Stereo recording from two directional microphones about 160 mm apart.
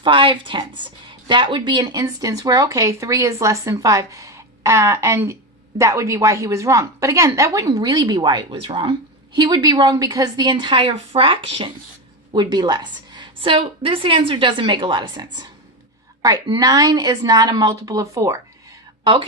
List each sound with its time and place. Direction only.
0.0 s speech: 30° right (ahead or behind)
19.0 s speech: 30° right (ahead or behind)